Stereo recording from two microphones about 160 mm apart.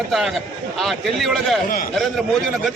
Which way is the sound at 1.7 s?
65° left (ahead or behind).